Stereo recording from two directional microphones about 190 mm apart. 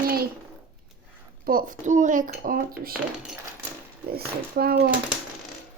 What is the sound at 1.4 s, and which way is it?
Speech, 45° right (ahead or behind).